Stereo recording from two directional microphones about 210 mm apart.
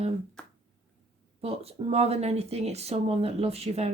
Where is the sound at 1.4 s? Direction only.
30° right (ahead or behind).